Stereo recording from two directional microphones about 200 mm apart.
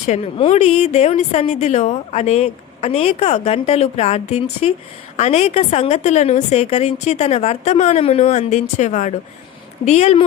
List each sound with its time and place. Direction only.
0.0 s a woman's voice: 35° left (ahead or behind)